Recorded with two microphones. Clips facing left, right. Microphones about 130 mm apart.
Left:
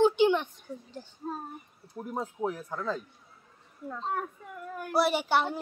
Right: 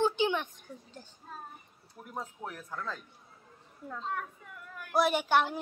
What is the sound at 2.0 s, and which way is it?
Speech, 20° left (ahead or behind).